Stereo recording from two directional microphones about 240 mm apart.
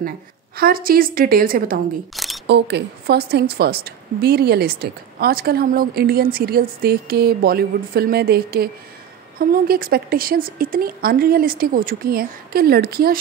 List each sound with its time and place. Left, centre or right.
0.6 s a woman's voice: right
2.1 s single-lens reflex camera: centre
2.4 s a woman's voice: right